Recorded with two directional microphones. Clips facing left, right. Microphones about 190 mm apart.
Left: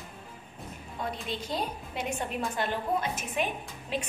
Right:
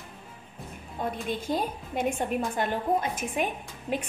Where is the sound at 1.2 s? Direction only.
50° right (ahead or behind).